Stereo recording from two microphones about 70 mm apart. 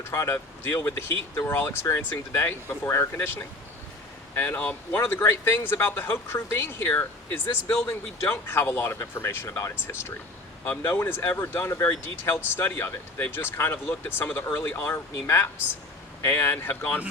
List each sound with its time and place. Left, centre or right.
0.0 s speech: left
4.9 s speech: left